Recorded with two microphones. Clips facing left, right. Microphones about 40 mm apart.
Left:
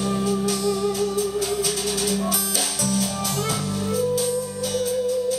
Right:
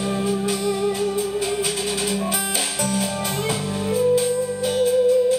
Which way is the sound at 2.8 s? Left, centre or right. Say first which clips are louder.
Right 1 dB; right.